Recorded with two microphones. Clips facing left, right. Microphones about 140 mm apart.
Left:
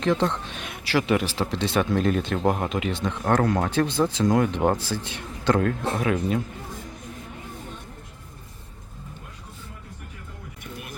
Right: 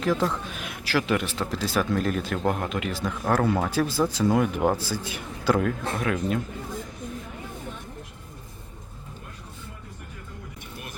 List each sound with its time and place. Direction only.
0.0 s speech: 5° right (ahead or behind)